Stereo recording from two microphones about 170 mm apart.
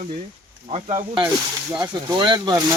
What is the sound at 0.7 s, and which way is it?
Speech, 30° right (ahead or behind).